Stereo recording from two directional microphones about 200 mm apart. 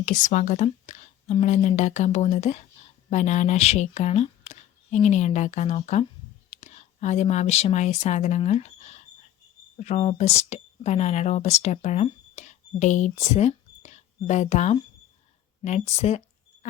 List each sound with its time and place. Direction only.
0.0 s a woman's voice: 40° left (ahead or behind)